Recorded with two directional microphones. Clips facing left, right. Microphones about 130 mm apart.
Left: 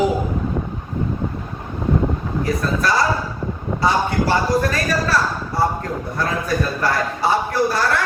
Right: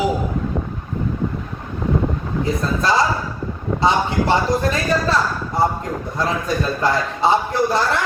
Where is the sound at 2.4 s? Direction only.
25° right (ahead or behind).